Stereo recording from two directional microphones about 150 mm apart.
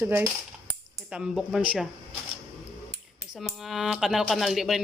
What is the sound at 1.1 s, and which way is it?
Speech, 5° right (ahead or behind).